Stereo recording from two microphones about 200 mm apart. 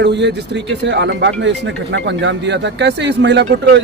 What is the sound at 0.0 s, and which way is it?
Speech, 60° right (ahead or behind).